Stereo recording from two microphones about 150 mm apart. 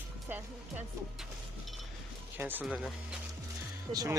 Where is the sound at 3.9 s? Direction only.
25° right (ahead or behind).